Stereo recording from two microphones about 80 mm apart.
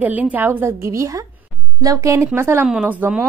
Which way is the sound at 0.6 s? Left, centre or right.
Right.